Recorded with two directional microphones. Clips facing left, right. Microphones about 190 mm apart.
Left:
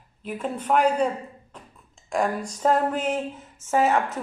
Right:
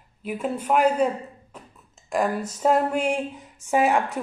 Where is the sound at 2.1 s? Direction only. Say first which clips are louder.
Right 1 dB; 5° right (ahead or behind).